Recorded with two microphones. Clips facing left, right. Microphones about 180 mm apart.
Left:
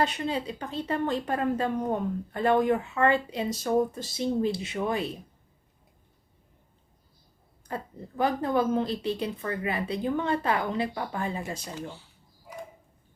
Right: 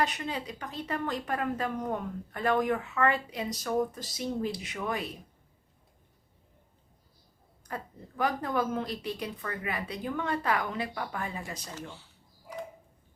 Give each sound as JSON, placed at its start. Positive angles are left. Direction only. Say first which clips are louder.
{"t": 0.0, "sound": "speech", "louder": "left 4 dB", "side_deg": 30}
{"t": 7.7, "sound": "speech", "louder": "left 4 dB", "side_deg": 25}